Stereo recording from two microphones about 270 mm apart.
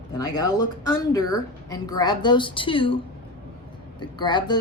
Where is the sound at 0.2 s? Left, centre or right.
Centre.